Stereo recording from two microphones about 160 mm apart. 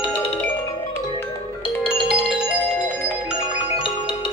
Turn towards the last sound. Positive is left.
turn(degrees=35)  # may be behind; listen again after turning